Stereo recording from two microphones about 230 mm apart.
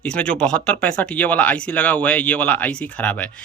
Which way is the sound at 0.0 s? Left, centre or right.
Centre.